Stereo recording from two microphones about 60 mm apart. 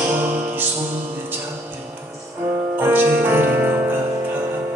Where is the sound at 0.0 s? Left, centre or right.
Right.